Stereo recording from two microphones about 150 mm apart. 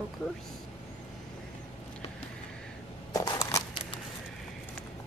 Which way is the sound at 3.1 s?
25° left (ahead or behind).